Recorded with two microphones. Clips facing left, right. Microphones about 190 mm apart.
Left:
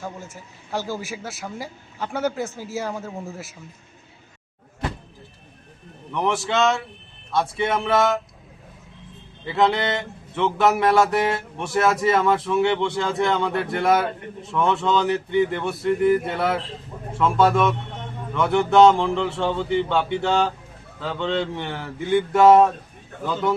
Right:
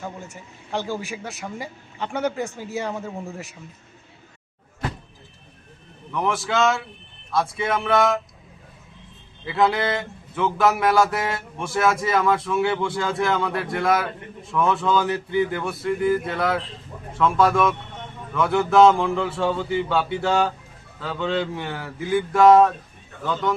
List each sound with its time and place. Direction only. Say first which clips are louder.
0.3 s a man's voice: right 1 dB; 5° left (ahead or behind)
6.1 s a man's voice: left 1 dB; centre (ahead or behind)
9.5 s a man's voice: even; centre (ahead or behind)
15.0 s a sound: left 2 dB; 25° left (ahead or behind)
15.5 s a man's voice: left 2 dB; centre (ahead or behind)